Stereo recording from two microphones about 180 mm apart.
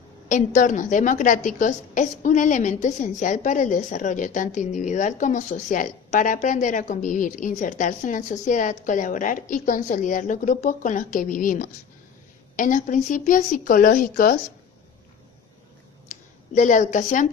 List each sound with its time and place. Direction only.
0.3 s a woman's voice: 45° left (ahead or behind)
16.1 s a sound: 40° left (ahead or behind)
16.6 s a woman's voice: 45° left (ahead or behind)